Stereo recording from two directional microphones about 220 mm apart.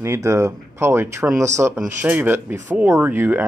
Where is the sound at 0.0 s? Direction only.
15° right (ahead or behind).